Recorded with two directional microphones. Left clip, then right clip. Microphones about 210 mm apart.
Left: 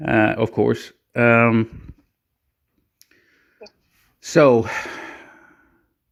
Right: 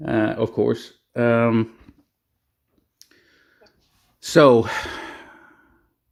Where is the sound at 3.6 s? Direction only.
45° left (ahead or behind).